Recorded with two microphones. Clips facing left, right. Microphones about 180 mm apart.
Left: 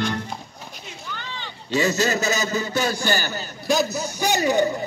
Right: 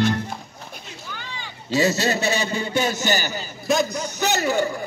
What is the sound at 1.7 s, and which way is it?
A man's voice, 35° right (ahead or behind).